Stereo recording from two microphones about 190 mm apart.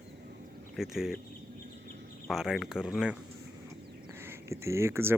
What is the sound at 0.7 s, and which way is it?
Speech, centre (ahead or behind).